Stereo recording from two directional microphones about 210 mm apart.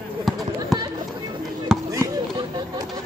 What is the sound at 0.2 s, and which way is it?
Run, centre (ahead or behind).